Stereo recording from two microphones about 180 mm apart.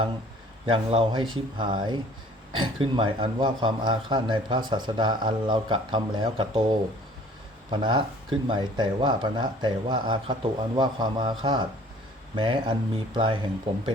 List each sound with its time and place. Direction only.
0.7 s a man's voice: 30° right (ahead or behind)
7.7 s a man's voice: 25° right (ahead or behind)